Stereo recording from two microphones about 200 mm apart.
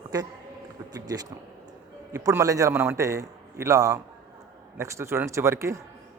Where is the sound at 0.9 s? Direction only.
20° right (ahead or behind).